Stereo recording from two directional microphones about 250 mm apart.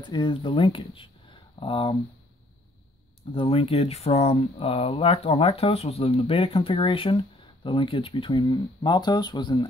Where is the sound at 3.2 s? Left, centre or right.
Left.